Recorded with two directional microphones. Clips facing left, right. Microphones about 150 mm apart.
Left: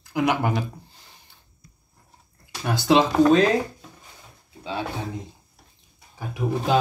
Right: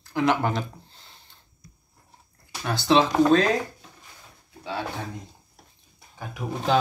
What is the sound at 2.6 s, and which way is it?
Speech, 15° left (ahead or behind).